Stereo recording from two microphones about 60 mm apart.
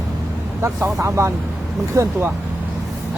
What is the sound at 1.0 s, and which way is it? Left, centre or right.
Speech, right.